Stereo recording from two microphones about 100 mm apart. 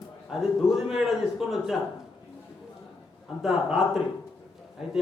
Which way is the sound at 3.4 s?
5° right (ahead or behind).